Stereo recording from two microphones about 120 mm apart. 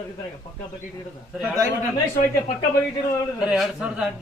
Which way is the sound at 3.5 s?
5° right (ahead or behind).